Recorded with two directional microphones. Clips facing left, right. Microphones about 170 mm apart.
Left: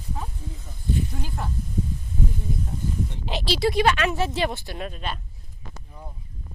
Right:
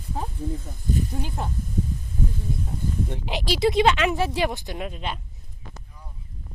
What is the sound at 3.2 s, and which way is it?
Speech, 15° right (ahead or behind).